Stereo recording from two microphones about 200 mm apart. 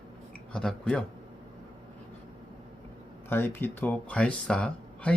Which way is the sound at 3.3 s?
10° left (ahead or behind).